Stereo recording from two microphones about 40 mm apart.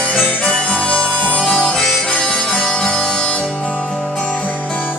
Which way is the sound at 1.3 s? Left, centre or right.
Centre.